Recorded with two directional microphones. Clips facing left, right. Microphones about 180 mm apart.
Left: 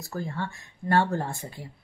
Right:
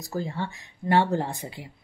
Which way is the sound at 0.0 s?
15° right (ahead or behind).